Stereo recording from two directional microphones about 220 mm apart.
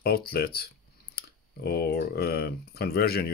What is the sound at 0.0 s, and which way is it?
Speech, 45° left (ahead or behind).